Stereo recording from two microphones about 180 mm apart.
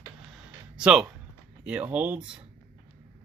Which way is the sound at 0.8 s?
5° right (ahead or behind).